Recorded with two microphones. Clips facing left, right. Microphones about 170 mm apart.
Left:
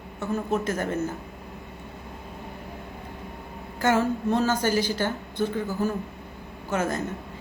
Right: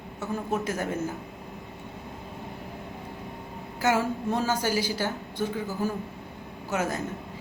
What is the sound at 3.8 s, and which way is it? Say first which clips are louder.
A woman's voice: left 2 dB; 10° right (ahead or behind).